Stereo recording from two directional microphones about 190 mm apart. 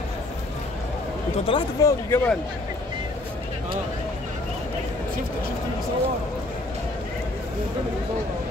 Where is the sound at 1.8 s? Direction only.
15° left (ahead or behind).